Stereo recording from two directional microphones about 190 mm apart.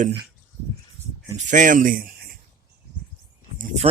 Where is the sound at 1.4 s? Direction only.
40° right (ahead or behind).